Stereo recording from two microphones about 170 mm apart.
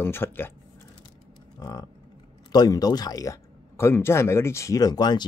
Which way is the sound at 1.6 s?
25° left (ahead or behind).